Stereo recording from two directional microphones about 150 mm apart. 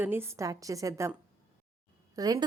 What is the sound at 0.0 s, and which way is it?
A woman's voice, 15° right (ahead or behind).